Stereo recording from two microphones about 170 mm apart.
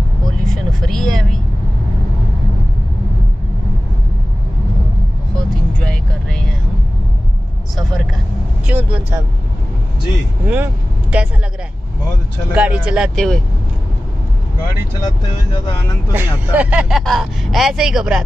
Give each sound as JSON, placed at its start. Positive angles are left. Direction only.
{"t": 0.8, "sound": "vehicle", "side_deg": 5}
{"t": 5.8, "sound": "vehicle", "side_deg": 5}
{"t": 8.6, "sound": "vehicle", "side_deg": -10}
{"t": 10.4, "sound": "vehicle", "side_deg": -10}
{"t": 12.5, "sound": "speech", "side_deg": -5}
{"t": 15.0, "sound": "speech", "side_deg": 30}
{"t": 16.1, "sound": "speech", "side_deg": -10}